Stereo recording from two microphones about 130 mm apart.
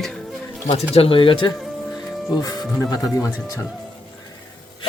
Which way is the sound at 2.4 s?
30° left (ahead or behind).